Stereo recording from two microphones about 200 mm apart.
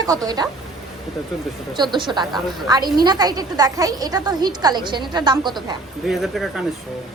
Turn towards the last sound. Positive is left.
turn(degrees=0)  # may be behind; listen again after turning